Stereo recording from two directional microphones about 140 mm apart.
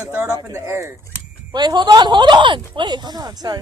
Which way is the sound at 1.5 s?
30° right (ahead or behind).